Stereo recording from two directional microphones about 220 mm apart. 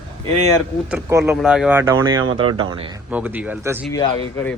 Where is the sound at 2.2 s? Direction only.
80° right.